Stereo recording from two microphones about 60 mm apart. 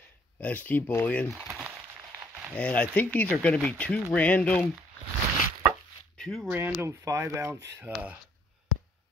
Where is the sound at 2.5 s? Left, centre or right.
Left.